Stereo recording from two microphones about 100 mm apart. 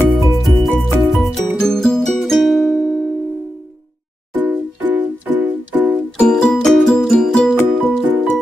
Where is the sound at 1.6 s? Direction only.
5° left (ahead or behind).